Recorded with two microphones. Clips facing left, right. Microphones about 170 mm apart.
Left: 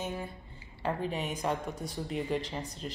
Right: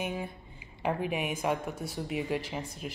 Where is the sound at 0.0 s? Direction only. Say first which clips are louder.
Right 2 dB; 15° right (ahead or behind).